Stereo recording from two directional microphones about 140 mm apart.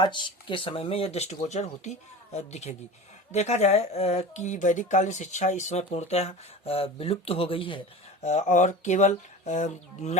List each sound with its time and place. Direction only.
0.0 s speech: 35° left (ahead or behind)
8.2 s speech: 55° left (ahead or behind)